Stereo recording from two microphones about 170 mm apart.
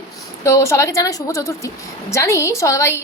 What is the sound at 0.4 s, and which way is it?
A woman's voice, 20° left (ahead or behind).